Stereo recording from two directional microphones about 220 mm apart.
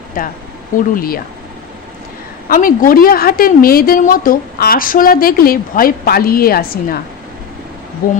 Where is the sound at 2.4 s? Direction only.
40° left (ahead or behind).